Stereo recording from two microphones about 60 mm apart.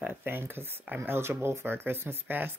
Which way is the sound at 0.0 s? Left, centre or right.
Right.